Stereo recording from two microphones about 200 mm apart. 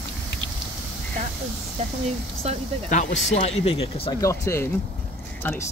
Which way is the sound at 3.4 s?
30° left (ahead or behind).